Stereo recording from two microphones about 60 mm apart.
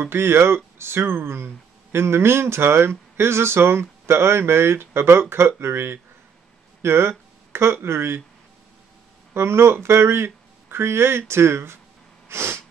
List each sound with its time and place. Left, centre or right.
0.0 s speech: right
9.3 s speech: right
12.3 s sneeze: right